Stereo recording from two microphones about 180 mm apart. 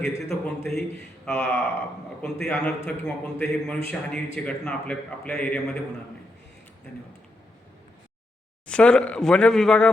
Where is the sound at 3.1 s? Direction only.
5° left (ahead or behind).